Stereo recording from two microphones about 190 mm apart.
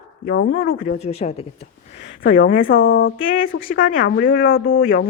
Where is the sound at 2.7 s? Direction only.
90° left.